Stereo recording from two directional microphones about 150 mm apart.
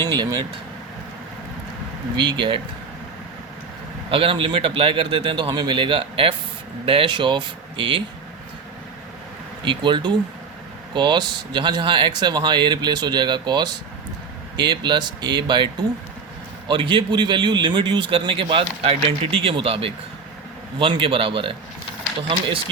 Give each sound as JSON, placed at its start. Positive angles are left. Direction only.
{"t": 0.0, "sound": "speech", "side_deg": -30}
{"t": 2.1, "sound": "a man's voice", "side_deg": -30}
{"t": 4.1, "sound": "a man's voice", "side_deg": -35}
{"t": 9.6, "sound": "a man's voice", "side_deg": -30}